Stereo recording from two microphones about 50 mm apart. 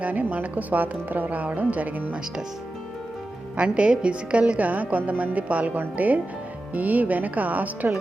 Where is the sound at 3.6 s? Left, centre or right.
Right.